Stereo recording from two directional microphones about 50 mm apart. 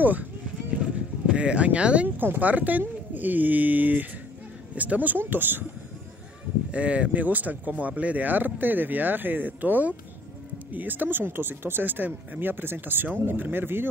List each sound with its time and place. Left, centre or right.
0.0 s clip-clop: right
2.0 s speech: right
6.7 s speech: right